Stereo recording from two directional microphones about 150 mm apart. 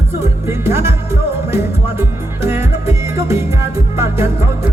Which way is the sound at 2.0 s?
15° right (ahead or behind).